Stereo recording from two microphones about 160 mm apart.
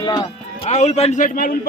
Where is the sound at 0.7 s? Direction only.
45° left (ahead or behind).